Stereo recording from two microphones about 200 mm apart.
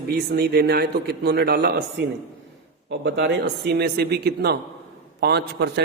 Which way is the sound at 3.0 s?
60° right (ahead or behind).